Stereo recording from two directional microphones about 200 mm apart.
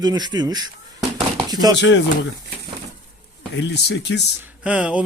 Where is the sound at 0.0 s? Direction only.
20° right (ahead or behind).